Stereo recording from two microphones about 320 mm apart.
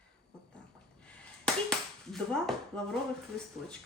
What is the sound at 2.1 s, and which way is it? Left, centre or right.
Speech, centre.